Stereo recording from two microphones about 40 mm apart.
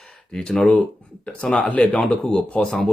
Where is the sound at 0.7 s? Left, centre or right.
Left.